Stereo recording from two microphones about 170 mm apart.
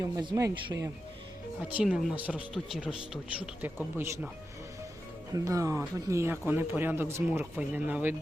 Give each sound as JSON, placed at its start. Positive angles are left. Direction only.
{"t": 0.0, "sound": "speech", "side_deg": -20}
{"t": 1.6, "sound": "speech", "side_deg": -5}
{"t": 5.3, "sound": "speech", "side_deg": -20}